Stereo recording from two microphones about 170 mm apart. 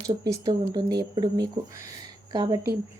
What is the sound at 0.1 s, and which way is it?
Speech, 25° right (ahead or behind).